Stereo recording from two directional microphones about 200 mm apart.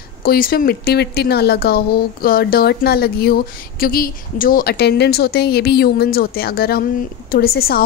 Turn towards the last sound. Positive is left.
turn(degrees=50)  # may be behind; listen again after turning